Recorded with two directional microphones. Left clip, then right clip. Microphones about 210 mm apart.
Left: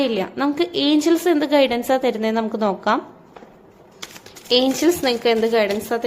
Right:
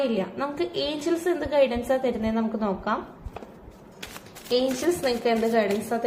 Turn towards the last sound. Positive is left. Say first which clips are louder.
# left 5 dB
turn(degrees=40)  # may be behind; listen again after turning